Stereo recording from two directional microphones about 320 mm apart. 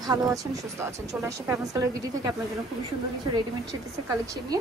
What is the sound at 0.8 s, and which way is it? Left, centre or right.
A woman's voice, centre.